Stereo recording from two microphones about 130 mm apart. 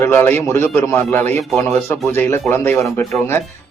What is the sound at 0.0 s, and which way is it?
A man's voice, 20° left (ahead or behind).